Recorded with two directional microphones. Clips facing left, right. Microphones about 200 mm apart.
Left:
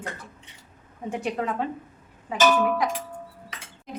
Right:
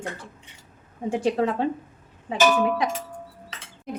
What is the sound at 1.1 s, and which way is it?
Speech, 30° right (ahead or behind).